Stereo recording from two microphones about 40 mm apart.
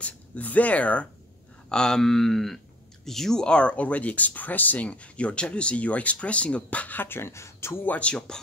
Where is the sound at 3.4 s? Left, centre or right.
Left.